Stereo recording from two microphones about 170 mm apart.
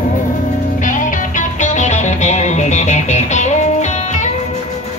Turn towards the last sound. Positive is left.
turn(degrees=45)  # may be behind; listen again after turning